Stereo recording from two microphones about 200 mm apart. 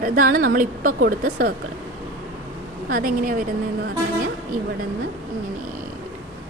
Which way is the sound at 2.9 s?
45° right (ahead or behind).